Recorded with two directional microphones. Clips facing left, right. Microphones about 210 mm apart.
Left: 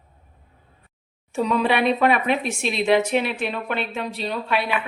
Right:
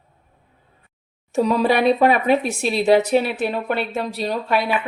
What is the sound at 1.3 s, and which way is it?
Speech, 40° right (ahead or behind).